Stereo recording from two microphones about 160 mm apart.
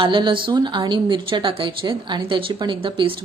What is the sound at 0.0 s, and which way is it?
A woman's voice, 30° right (ahead or behind).